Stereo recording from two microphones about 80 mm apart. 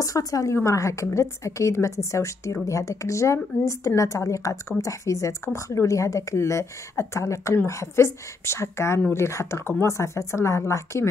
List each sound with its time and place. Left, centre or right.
0.0 s a woman's voice: left